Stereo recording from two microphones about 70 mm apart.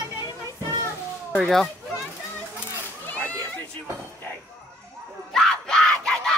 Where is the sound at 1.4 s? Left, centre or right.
Centre.